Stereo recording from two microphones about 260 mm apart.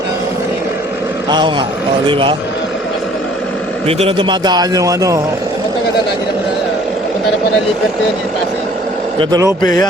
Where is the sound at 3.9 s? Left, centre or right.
Right.